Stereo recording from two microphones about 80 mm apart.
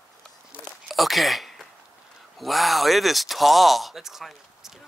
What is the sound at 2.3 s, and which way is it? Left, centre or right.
Speech, centre.